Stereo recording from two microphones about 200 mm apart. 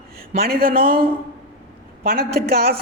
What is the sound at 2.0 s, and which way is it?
Speech, 50° right (ahead or behind).